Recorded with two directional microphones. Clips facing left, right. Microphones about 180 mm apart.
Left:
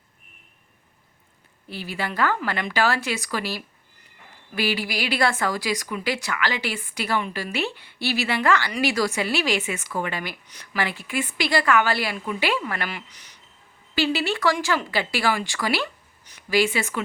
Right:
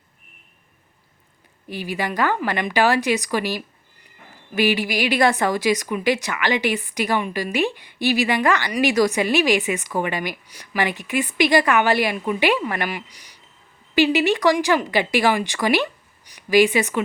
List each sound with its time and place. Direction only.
1.6 s speech: 15° right (ahead or behind)